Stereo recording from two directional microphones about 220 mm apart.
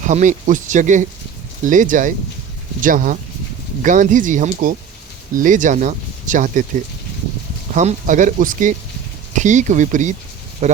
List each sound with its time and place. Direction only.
0.0 s speech: 35° right (ahead or behind)
7.7 s speech: 35° right (ahead or behind)